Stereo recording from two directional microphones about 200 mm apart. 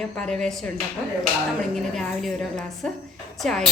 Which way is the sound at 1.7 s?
Centre (ahead or behind).